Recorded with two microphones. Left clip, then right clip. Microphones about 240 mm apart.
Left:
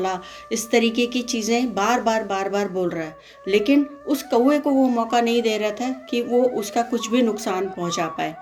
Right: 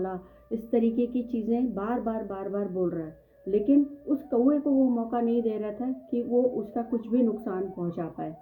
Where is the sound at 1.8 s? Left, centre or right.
Left.